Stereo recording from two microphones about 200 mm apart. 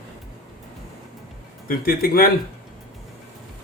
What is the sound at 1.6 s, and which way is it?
Speech, 45° left (ahead or behind).